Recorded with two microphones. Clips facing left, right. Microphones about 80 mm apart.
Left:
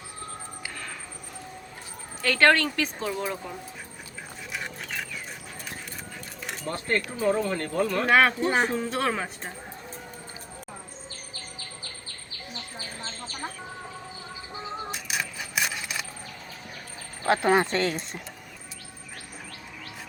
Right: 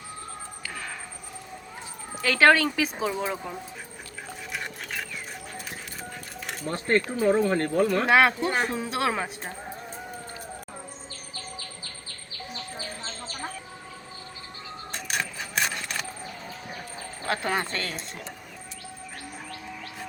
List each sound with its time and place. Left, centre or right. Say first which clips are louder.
2.2 s speech: right 2 dB; centre
4.5 s dog: even; centre
6.7 s speech: right 4 dB; right
8.0 s speech: left 3 dB; centre
14.8 s keys jangling: right 1 dB; centre
17.2 s speech: left 6 dB; left